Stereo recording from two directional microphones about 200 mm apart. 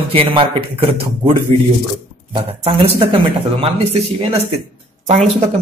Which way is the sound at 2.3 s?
25° right (ahead or behind).